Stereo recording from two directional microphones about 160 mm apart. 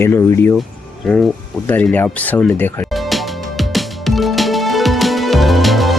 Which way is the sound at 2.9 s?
Centre (ahead or behind).